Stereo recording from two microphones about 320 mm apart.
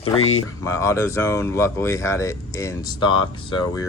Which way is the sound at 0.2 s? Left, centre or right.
Left.